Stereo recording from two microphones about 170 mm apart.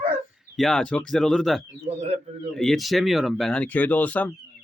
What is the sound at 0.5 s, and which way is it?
Speech, centre (ahead or behind).